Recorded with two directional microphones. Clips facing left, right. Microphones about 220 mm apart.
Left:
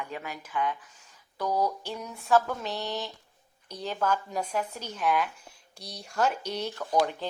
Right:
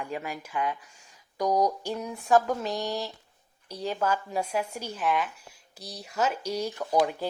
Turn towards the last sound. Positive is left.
turn(degrees=-10)  # may be behind; listen again after turning